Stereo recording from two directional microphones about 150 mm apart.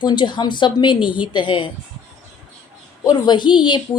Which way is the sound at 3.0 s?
30° left (ahead or behind).